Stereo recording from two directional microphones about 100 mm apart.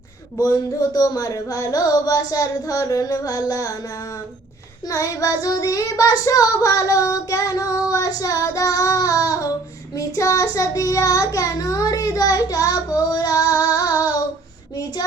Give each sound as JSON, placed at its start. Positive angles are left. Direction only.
{"t": 0.4, "sound": "child singing", "side_deg": 35}
{"t": 4.9, "sound": "child singing", "side_deg": 35}